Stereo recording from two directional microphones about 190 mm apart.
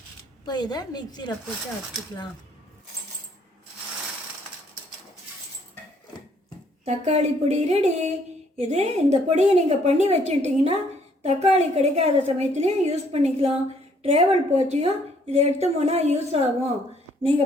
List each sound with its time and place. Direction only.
0.4 s a woman's voice: 20° left (ahead or behind)
6.8 s a woman's voice: 35° right (ahead or behind)